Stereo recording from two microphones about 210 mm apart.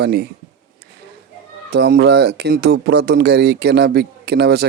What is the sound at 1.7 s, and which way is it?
Speech, 50° right (ahead or behind).